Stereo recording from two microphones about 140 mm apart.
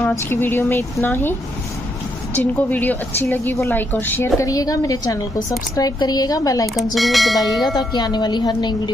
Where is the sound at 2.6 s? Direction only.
10° left (ahead or behind).